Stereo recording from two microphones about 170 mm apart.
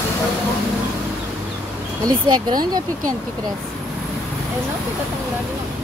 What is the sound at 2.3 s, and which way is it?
Speech, 25° right (ahead or behind).